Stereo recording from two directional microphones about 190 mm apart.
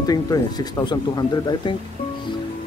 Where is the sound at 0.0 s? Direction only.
20° left (ahead or behind).